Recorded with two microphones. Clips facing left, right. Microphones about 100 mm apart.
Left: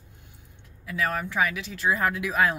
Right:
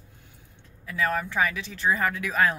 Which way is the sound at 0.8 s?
15° left (ahead or behind).